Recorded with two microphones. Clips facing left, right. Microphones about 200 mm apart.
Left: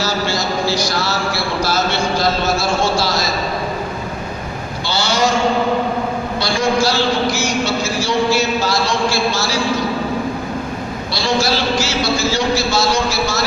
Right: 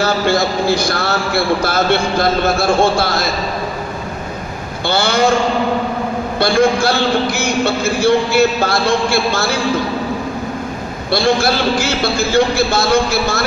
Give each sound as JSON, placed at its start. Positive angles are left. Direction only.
{"t": 0.0, "sound": "a man's voice", "side_deg": -55}
{"t": 4.8, "sound": "a man's voice", "side_deg": -55}
{"t": 6.4, "sound": "a man's voice", "side_deg": -55}
{"t": 11.1, "sound": "a man's voice", "side_deg": -55}